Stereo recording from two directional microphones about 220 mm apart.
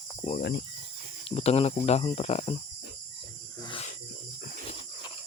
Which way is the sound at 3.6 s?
20° left (ahead or behind).